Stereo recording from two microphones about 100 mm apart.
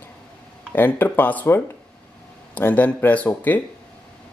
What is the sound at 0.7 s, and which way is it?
Speech, 20° left (ahead or behind).